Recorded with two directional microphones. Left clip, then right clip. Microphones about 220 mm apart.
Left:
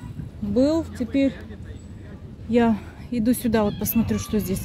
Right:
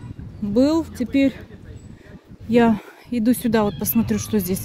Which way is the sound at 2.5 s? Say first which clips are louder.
Right 3 dB; 25° right (ahead or behind).